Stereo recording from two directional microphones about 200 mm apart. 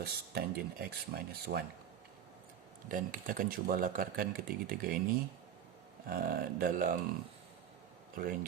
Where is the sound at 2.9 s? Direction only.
45° right (ahead or behind).